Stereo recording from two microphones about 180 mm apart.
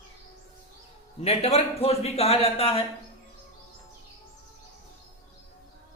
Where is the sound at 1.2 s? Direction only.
35° left (ahead or behind).